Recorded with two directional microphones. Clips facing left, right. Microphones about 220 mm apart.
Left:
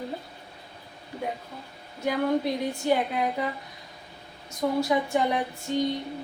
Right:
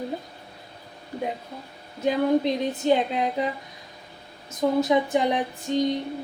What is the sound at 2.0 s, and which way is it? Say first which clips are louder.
A woman's voice: right 4 dB; 20° right (ahead or behind).